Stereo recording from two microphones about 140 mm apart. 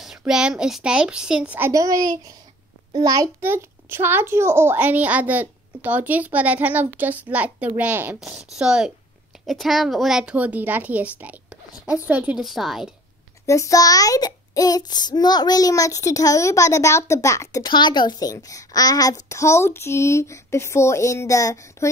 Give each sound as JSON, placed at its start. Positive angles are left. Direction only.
{"t": 0.2, "sound": "a woman's voice", "side_deg": -5}
{"t": 1.7, "sound": "a child's voice", "side_deg": -25}
{"t": 13.5, "sound": "a child's voice", "side_deg": 25}